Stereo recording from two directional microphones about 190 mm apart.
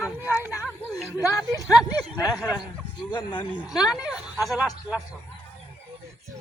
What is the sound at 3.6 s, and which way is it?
A woman's voice, 5° right (ahead or behind).